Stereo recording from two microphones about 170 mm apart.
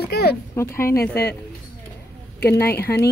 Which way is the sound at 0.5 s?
15° left (ahead or behind).